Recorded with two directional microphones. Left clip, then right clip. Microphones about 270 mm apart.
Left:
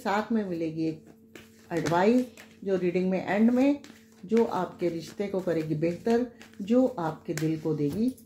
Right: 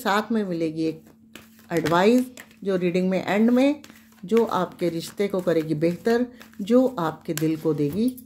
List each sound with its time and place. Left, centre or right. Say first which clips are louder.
0.0 s speech: right 5 dB; right
1.3 s a sound: right 6 dB; right
1.9 s speech: right 5 dB; right